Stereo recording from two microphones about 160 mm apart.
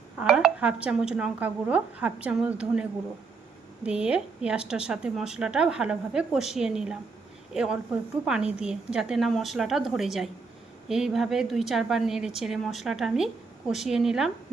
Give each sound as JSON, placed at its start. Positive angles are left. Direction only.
{"t": 0.2, "sound": "speech", "side_deg": -5}
{"t": 3.8, "sound": "a woman's voice", "side_deg": -5}